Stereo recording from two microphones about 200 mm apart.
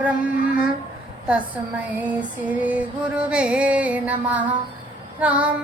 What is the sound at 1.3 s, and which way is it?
Female singing, 5° right (ahead or behind).